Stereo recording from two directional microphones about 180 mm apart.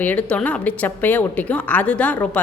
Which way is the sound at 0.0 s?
10° left (ahead or behind).